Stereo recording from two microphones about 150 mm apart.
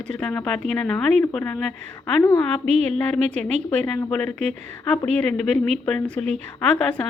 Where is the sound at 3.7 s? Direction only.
10° left (ahead or behind).